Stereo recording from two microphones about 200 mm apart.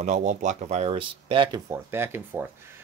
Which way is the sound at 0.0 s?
35° right (ahead or behind).